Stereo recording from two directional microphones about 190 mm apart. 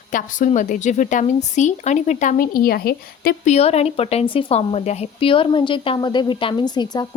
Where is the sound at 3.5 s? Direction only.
35° left (ahead or behind).